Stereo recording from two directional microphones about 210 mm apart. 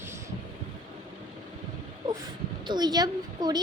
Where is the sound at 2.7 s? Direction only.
20° right (ahead or behind).